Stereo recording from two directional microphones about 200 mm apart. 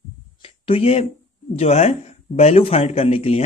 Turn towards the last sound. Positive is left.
turn(degrees=30)  # may be behind; listen again after turning